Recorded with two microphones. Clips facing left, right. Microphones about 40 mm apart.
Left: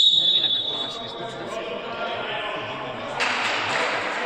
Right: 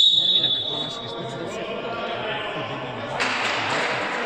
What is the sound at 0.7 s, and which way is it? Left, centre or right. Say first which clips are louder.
Speech: right 1 dB; centre.